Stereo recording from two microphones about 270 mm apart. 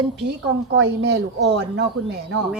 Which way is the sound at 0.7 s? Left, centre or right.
Right.